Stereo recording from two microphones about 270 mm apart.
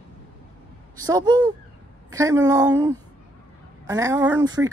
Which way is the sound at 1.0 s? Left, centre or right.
Centre.